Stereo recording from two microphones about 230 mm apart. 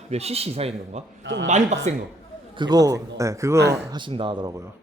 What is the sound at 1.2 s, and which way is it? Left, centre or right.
Speech, right.